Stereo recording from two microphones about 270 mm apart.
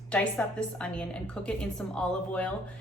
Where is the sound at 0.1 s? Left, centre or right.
Centre.